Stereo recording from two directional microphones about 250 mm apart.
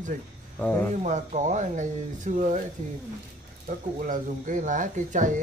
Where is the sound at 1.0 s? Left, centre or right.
Right.